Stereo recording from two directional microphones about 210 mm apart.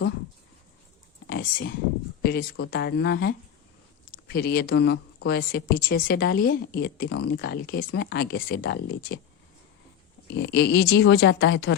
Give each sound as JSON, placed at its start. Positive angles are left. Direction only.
{"t": 1.3, "sound": "a sound", "side_deg": 45}
{"t": 2.2, "sound": "a woman's voice", "side_deg": 50}
{"t": 10.2, "sound": "speech", "side_deg": 55}